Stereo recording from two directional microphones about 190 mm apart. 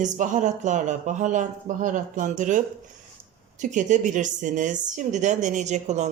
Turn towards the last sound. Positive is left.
turn(degrees=-35)  # may be behind; listen again after turning